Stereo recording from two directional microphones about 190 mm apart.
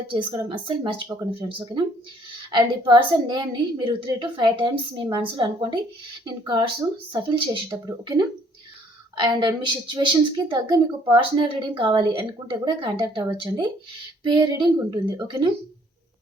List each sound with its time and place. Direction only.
0.1 s a woman's voice: 25° right (ahead or behind)